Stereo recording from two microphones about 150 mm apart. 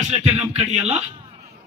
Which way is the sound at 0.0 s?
50° right (ahead or behind).